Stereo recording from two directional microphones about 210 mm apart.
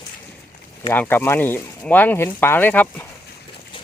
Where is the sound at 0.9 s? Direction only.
10° left (ahead or behind).